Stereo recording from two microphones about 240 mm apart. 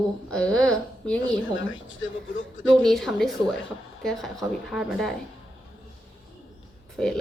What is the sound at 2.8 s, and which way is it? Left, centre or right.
A woman's voice, centre.